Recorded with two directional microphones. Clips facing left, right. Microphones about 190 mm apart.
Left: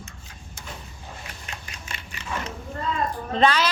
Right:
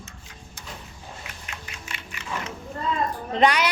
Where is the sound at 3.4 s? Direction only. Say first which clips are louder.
Even; 15° right (ahead or behind).